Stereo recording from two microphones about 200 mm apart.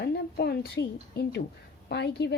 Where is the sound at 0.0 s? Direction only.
55° left (ahead or behind).